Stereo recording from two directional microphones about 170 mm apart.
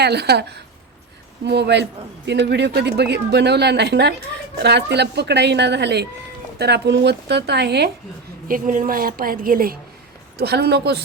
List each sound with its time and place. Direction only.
0.0 s speech: 75° right (ahead or behind)
1.5 s a man's voice: 90° right
8.4 s a woman's voice: 50° right (ahead or behind)
10.3 s speech: 70° right (ahead or behind)